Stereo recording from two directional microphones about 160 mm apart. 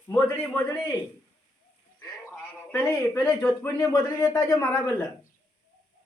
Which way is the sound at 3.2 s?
15° left (ahead or behind).